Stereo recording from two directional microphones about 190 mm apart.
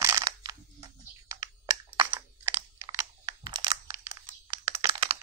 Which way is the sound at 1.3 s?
15° right (ahead or behind).